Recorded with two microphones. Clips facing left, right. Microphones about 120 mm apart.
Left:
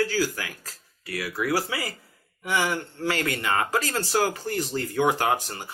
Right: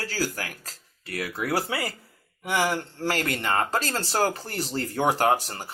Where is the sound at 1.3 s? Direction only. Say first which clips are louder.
Left 1 dB; 25° right (ahead or behind).